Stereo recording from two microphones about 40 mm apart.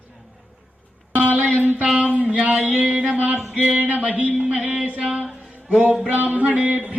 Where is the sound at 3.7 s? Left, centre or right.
Right.